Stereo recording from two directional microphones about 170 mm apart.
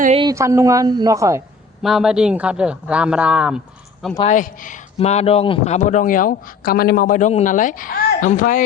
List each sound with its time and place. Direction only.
0.3 s a woman's voice: 15° right (ahead or behind)
1.8 s a man's voice: centre (ahead or behind)
4.3 s speech: 50° left (ahead or behind)
4.9 s speech: 35° left (ahead or behind); by 8.6 s 50° left (ahead or behind)